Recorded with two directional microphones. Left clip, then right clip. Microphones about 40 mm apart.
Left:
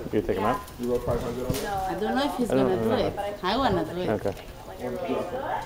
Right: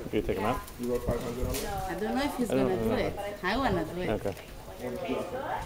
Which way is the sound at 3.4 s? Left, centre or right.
Right.